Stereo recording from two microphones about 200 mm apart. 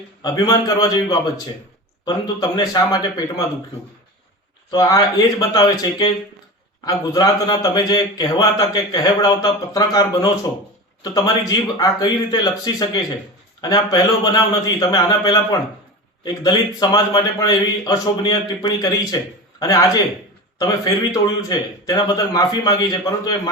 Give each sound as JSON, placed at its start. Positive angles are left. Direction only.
{"t": 0.2, "sound": "a man's voice", "side_deg": 20}
{"t": 4.7, "sound": "a man's voice", "side_deg": 20}